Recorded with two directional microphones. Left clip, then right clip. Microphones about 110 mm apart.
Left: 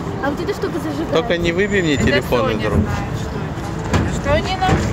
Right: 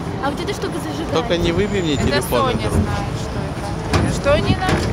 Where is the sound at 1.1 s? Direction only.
20° left (ahead or behind).